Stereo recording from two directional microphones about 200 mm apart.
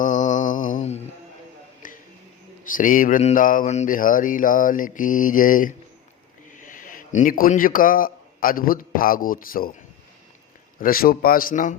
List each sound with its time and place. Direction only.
0.0 s mantra: 40° left (ahead or behind)
1.8 s music: 40° left (ahead or behind)
2.7 s a man's voice: 40° left (ahead or behind)
10.8 s speech: 45° left (ahead or behind)